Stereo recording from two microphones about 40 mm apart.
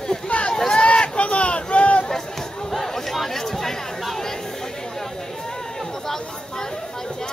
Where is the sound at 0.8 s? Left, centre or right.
Left.